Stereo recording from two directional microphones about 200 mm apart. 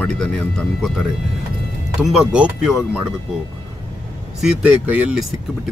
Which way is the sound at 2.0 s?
5° right (ahead or behind).